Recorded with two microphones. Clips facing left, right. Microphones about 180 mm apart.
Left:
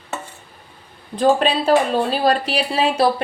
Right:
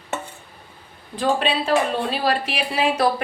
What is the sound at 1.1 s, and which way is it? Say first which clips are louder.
Speech: left 5 dB; 40° left (ahead or behind).